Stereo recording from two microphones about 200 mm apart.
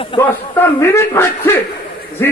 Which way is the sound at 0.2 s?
10° left (ahead or behind).